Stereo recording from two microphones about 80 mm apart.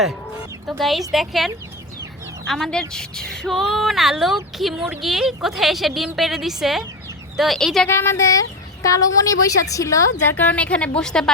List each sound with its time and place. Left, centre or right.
0.7 s a woman's voice: centre
7.9 s speech: left
10.2 s a woman's voice: left